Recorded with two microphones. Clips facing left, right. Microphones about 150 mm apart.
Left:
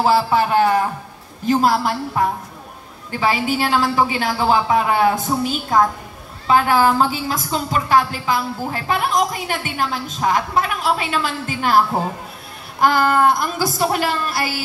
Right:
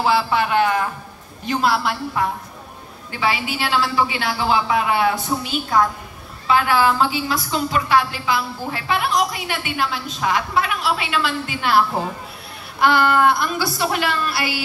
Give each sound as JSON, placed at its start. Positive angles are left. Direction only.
{"t": 0.0, "sound": "a woman's voice", "side_deg": 40}
{"t": 12.8, "sound": "a woman's voice", "side_deg": 40}